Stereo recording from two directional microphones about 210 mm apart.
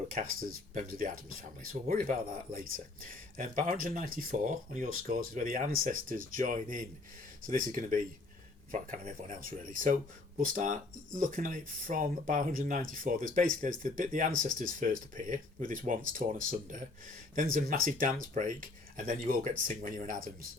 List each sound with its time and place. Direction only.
0.7 s speech: 40° right (ahead or behind)